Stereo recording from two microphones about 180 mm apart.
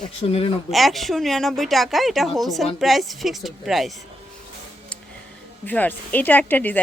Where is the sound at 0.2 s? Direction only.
30° left (ahead or behind).